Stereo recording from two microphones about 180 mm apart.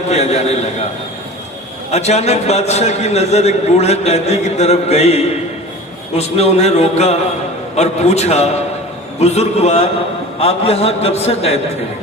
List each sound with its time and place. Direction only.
0.1 s a man's voice: 35° left (ahead or behind)
1.9 s a man's voice: 35° left (ahead or behind)